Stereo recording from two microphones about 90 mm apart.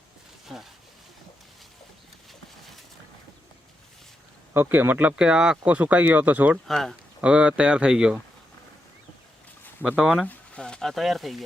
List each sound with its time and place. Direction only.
0.5 s speech: 5° right (ahead or behind)
4.5 s speech: 25° right (ahead or behind)
6.7 s speech: centre (ahead or behind)
7.2 s speech: 10° right (ahead or behind)
10.0 s speech: centre (ahead or behind)